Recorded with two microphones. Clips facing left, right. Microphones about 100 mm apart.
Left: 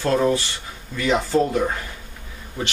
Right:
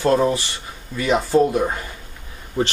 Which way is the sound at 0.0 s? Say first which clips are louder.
Right 2 dB; 15° right (ahead or behind).